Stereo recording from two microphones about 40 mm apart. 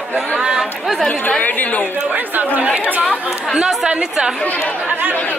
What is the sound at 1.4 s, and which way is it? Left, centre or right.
Speech, left.